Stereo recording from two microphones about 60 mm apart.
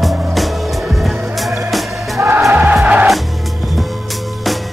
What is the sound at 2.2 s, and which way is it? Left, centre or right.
Music, right.